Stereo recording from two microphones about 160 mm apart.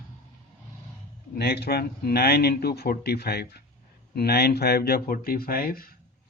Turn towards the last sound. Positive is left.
turn(degrees=70)  # may be behind; listen again after turning